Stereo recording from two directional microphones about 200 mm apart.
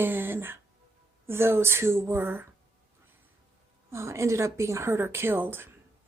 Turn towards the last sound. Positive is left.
turn(degrees=-10)  # may be behind; listen again after turning